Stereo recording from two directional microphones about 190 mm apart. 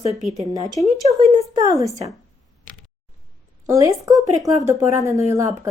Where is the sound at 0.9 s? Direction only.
35° right (ahead or behind).